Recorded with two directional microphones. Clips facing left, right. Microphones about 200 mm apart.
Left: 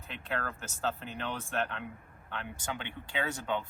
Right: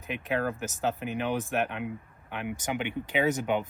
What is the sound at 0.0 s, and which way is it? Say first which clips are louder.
Speech: right 8 dB; 15° right (ahead or behind).